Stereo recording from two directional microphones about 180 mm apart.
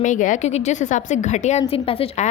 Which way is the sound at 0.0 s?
45° left (ahead or behind).